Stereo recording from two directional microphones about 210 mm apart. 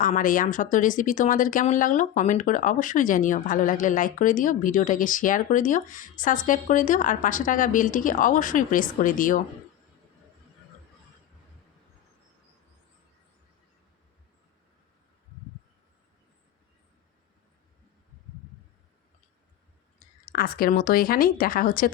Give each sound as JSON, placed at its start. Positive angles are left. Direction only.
{"t": 0.0, "sound": "speech", "side_deg": 40}
{"t": 20.0, "sound": "speech", "side_deg": 45}